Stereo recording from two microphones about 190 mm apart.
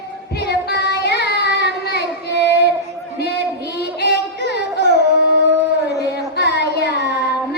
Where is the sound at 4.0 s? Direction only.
60° left (ahead or behind).